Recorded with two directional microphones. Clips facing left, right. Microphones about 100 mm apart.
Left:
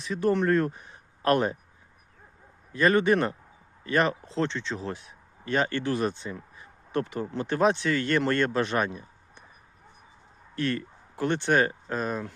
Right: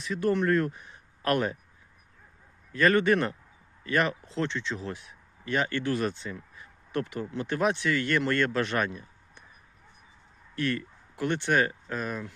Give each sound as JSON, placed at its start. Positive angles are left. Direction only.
{"t": 0.0, "sound": "speech", "side_deg": 25}
{"t": 2.7, "sound": "a man's voice", "side_deg": 20}
{"t": 10.5, "sound": "speech", "side_deg": 30}